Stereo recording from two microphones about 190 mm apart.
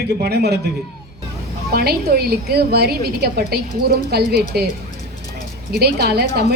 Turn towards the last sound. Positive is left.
turn(degrees=-55)  # may be behind; listen again after turning